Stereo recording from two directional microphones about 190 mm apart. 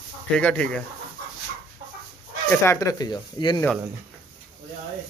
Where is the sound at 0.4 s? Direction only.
5° left (ahead or behind).